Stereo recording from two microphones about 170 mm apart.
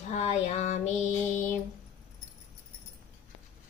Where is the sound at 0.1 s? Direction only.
40° left (ahead or behind).